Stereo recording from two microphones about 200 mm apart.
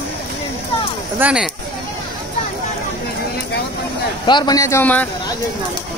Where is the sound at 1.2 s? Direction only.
5° right (ahead or behind).